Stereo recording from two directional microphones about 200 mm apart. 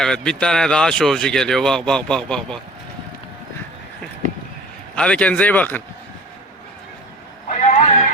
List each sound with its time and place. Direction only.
0.0 s speech: 5° left (ahead or behind)
4.9 s speech: 5° left (ahead or behind)
7.4 s a sound: 35° left (ahead or behind)